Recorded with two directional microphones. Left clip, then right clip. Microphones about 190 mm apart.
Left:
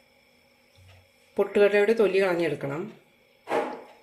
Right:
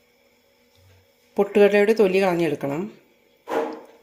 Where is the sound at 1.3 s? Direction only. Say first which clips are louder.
Right 4 dB; 35° right (ahead or behind).